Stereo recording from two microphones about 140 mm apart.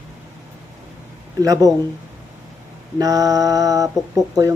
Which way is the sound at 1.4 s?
25° right (ahead or behind).